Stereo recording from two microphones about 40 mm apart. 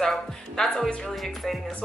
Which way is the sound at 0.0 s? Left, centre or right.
Centre.